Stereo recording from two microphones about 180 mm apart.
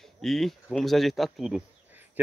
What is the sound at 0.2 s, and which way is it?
Speech, centre (ahead or behind).